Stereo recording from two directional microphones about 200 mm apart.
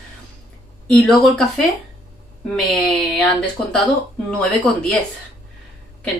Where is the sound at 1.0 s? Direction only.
Centre (ahead or behind).